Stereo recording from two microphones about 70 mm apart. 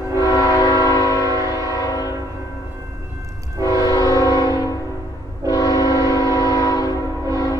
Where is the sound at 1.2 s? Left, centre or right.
Right.